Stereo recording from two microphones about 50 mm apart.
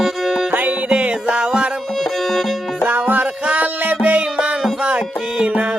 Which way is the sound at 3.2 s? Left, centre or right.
Right.